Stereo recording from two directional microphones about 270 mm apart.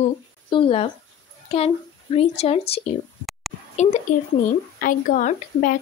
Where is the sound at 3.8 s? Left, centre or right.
Left.